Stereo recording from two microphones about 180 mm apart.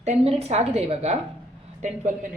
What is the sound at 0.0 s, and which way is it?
A woman's voice, 35° right (ahead or behind).